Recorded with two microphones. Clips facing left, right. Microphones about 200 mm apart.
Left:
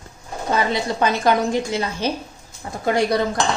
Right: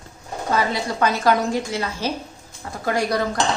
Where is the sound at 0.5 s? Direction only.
20° left (ahead or behind).